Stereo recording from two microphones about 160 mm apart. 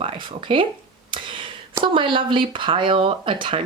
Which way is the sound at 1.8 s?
30° right (ahead or behind).